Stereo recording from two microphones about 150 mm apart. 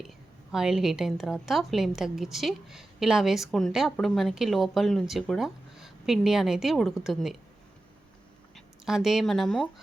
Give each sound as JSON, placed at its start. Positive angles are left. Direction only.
{"t": 0.0, "sound": "a woman's voice", "side_deg": -5}
{"t": 8.5, "sound": "speech", "side_deg": 0}